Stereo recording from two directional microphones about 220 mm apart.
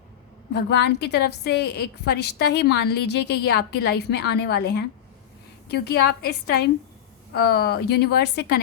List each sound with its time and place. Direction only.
0.5 s a woman's voice: 50° left (ahead or behind)